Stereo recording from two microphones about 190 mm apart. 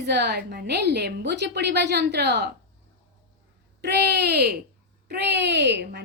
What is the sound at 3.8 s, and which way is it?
A woman's voice, 60° right (ahead or behind).